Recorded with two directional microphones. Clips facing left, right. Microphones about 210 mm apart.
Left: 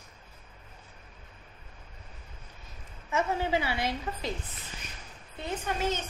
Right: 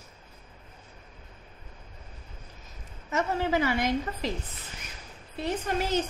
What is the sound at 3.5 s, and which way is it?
Speech, 45° right (ahead or behind).